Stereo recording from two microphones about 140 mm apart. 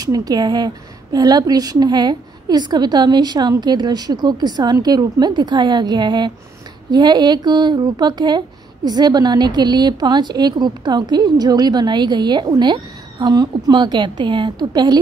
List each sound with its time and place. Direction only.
0.0 s a woman's voice: 25° right (ahead or behind)